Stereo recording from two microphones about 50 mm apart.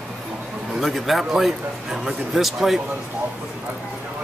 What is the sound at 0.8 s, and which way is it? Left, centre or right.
Speech, centre.